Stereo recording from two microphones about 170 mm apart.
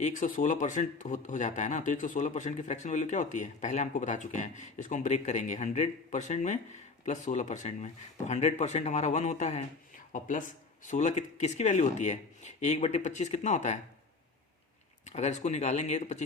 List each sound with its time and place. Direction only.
0.0 s speech: 45° left (ahead or behind)
15.0 s speech: 45° left (ahead or behind)